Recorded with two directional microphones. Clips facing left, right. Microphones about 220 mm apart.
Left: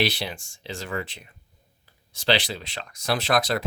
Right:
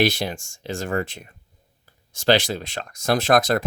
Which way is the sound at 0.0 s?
45° right (ahead or behind).